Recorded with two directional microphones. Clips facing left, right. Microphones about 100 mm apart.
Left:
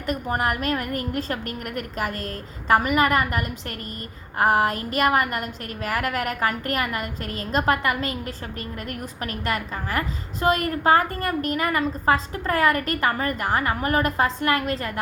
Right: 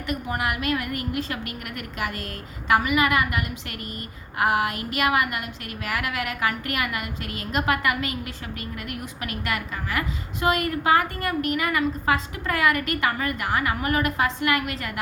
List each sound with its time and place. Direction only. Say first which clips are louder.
0.1 s a woman's voice: left 3 dB; 40° left (ahead or behind)